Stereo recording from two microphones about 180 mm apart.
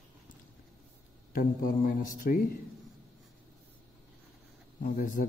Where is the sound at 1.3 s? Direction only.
50° left (ahead or behind).